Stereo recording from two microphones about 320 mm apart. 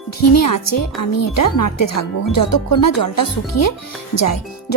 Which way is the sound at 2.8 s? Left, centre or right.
Left.